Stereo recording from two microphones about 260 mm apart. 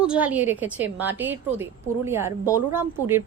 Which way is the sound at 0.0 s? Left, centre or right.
Centre.